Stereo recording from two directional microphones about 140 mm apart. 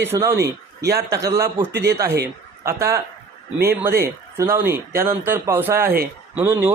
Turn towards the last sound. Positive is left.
turn(degrees=-15)  # may be behind; listen again after turning